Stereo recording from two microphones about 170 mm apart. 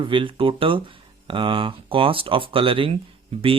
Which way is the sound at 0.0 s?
30° right (ahead or behind).